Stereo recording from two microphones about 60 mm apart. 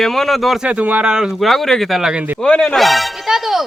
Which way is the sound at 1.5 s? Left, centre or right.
Centre.